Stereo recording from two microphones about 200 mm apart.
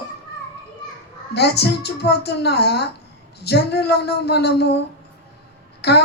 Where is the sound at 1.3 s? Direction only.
55° left (ahead or behind).